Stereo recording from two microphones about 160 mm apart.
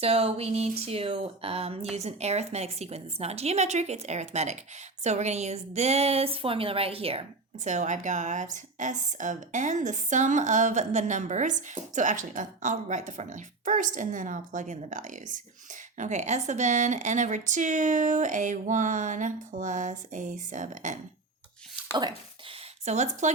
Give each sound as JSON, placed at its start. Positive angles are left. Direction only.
{"t": 0.0, "sound": "a woman's voice", "side_deg": -40}
{"t": 22.9, "sound": "a woman's voice", "side_deg": -45}